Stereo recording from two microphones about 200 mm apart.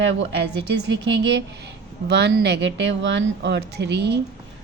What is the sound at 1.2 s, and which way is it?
Speech, 60° right (ahead or behind).